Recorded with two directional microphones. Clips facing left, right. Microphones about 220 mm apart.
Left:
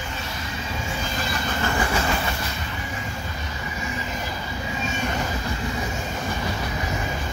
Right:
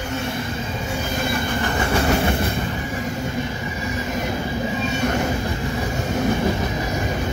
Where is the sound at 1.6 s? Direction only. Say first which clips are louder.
Right 1 dB; 25° right (ahead or behind).